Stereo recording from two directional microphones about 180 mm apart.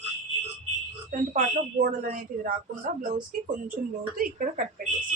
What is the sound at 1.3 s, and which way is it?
A woman's voice, 50° right (ahead or behind).